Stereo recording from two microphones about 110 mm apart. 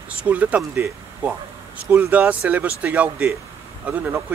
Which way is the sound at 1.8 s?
15° right (ahead or behind).